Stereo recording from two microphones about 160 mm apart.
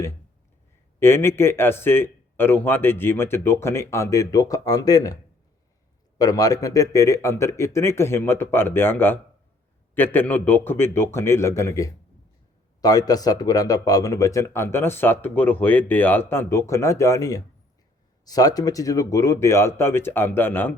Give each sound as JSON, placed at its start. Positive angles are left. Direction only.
{"t": 0.9, "sound": "a man's voice", "side_deg": 15}
{"t": 6.1, "sound": "a man's voice", "side_deg": 25}